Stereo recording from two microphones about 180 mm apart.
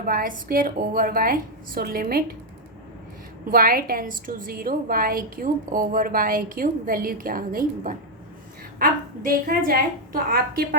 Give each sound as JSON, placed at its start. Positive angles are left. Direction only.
{"t": 0.0, "sound": "a woman's voice", "side_deg": -50}
{"t": 3.5, "sound": "a woman's voice", "side_deg": -55}